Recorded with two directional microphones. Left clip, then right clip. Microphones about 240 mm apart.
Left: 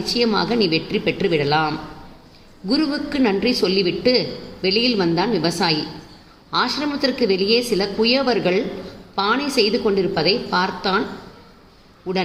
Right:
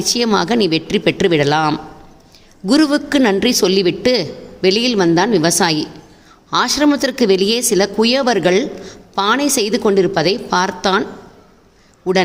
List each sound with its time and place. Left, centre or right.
0.0 s a man's voice: right